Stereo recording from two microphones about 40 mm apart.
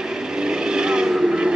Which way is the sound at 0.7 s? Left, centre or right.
Centre.